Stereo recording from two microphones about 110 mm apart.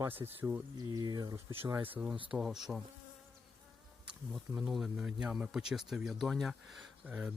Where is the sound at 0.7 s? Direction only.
35° right (ahead or behind).